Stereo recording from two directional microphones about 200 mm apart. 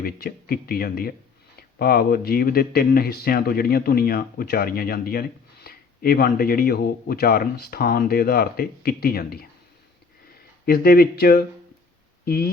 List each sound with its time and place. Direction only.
0.0 s speech: 50° left (ahead or behind)
10.7 s speech: 50° left (ahead or behind)